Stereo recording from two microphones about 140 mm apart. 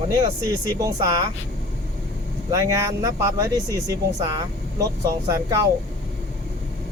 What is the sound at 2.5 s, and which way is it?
Speech, 25° right (ahead or behind).